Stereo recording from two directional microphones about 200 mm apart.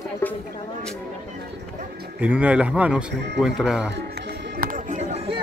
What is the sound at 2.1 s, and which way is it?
Speech, 10° right (ahead or behind).